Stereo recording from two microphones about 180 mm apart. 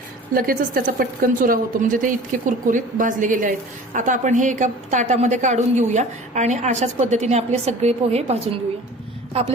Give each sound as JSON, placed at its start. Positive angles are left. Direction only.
{"t": 0.3, "sound": "a woman's voice", "side_deg": -55}